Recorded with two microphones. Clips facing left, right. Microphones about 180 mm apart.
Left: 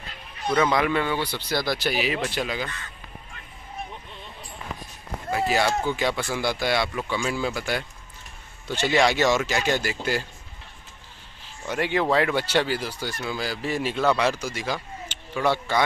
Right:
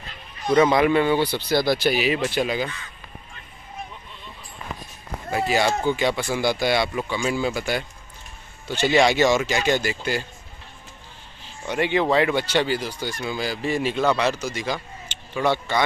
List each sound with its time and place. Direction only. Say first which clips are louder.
0.5 s speech: right 5 dB; 25° right (ahead or behind)
5.5 s speech: right 3 dB; centre (ahead or behind)
11.6 s speech: right 2 dB; 5° left (ahead or behind)